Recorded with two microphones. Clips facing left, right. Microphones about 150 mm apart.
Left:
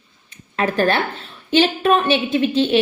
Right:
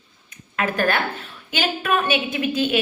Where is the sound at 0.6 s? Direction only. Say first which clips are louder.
Left 4 dB; 30° left (ahead or behind).